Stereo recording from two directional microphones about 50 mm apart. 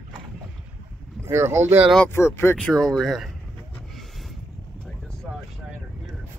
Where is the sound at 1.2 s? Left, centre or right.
Right.